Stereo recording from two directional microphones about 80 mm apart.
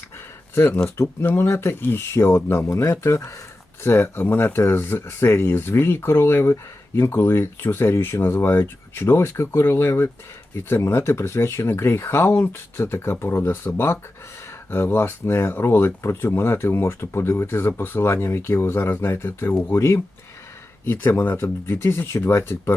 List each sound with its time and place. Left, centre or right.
0.5 s speech: left